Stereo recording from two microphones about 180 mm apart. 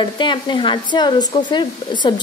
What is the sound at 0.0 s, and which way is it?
A woman's voice, 25° left (ahead or behind).